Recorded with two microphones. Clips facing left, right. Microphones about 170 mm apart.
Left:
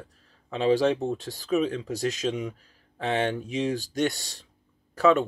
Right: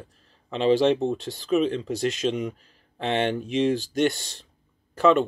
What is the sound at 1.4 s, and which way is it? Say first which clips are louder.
Speech: right 3 dB; 20° right (ahead or behind).